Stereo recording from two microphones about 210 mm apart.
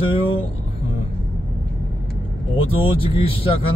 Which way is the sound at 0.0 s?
25° left (ahead or behind).